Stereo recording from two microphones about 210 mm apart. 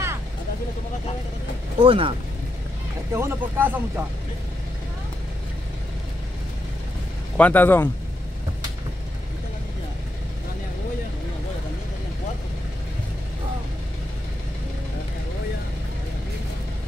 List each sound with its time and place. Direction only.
1.8 s speech: 25° right (ahead or behind)
3.1 s speech: 10° right (ahead or behind)
7.3 s speech: 10° left (ahead or behind)